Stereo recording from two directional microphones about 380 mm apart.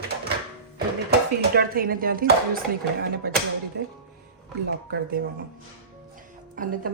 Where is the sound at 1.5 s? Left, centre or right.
Right.